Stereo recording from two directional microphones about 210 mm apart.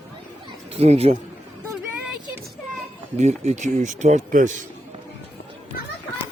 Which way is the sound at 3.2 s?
30° right (ahead or behind).